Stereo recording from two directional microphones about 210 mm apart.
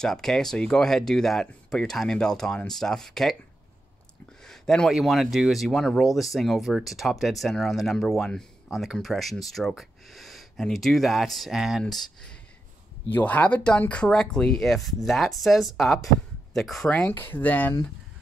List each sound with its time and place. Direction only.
0.0 s speech: centre (ahead or behind)
4.5 s speech: centre (ahead or behind)